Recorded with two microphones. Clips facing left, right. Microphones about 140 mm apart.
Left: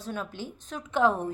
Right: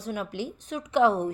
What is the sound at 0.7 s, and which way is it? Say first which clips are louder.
Speech: right 3 dB; 15° right (ahead or behind).